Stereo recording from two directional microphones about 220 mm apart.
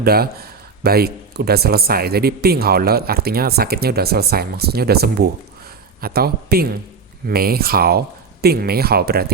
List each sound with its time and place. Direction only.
0.0 s speech: 45° right (ahead or behind)